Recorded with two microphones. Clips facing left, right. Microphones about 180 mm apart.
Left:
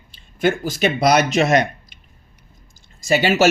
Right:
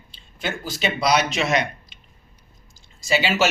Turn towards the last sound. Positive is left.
turn(degrees=45)  # may be behind; listen again after turning